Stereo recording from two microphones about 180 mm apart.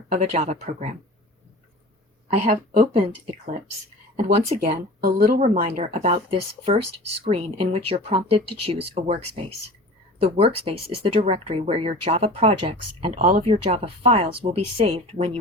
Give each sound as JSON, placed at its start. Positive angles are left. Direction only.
{"t": 0.1, "sound": "speech", "side_deg": -35}
{"t": 2.2, "sound": "speech", "side_deg": -35}
{"t": 4.9, "sound": "speech", "side_deg": -55}
{"t": 5.4, "sound": "speech", "side_deg": -35}
{"t": 13.1, "sound": "speech", "side_deg": -50}
{"t": 13.4, "sound": "speech", "side_deg": -30}